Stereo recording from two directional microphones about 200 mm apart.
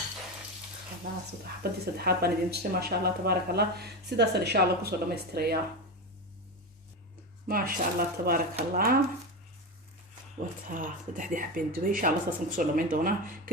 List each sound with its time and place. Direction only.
1.6 s speech: 55° right (ahead or behind)
7.4 s speech: 45° right (ahead or behind)
10.7 s speech: 40° right (ahead or behind)